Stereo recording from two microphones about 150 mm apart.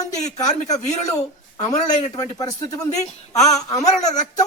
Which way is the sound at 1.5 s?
50° left (ahead or behind).